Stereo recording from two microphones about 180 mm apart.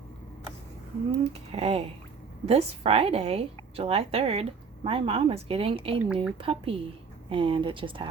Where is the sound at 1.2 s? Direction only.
35° right (ahead or behind).